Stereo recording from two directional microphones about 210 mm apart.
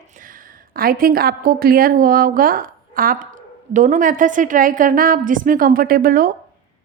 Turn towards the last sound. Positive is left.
turn(degrees=-45)  # may be behind; listen again after turning